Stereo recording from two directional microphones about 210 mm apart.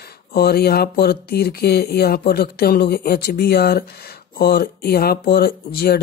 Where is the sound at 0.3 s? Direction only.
50° left (ahead or behind).